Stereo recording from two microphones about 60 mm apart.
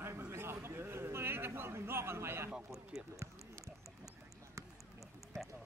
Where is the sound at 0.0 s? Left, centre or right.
Right.